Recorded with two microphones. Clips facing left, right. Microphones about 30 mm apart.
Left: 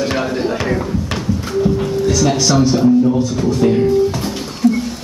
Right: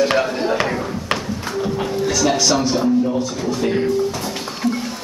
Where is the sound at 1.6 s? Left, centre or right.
Centre.